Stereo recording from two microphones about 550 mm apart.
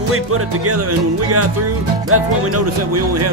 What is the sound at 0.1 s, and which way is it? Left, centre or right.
Music, right.